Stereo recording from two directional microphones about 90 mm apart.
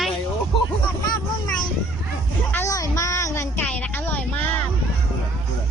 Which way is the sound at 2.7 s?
40° left (ahead or behind).